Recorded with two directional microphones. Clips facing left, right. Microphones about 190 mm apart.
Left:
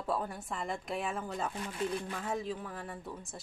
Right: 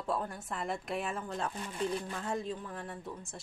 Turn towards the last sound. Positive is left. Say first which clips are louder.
# even
turn(degrees=0)  # may be behind; listen again after turning